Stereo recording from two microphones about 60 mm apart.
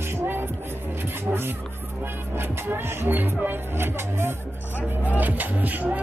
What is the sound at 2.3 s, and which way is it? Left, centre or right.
Music, right.